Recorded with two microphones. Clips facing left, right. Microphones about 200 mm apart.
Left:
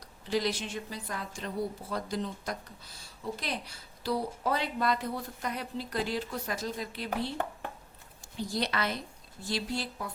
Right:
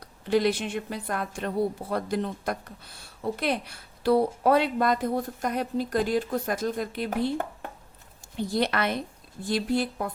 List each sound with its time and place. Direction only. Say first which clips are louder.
0.3 s a woman's voice: right 7 dB; 60° right (ahead or behind)